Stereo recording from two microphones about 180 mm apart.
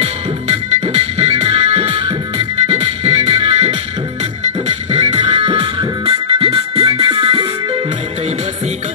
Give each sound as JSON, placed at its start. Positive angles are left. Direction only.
{"t": 0.0, "sound": "music", "side_deg": -35}
{"t": 5.1, "sound": "music", "side_deg": -25}